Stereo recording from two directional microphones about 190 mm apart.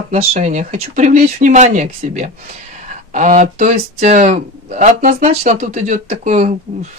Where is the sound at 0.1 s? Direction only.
35° right (ahead or behind).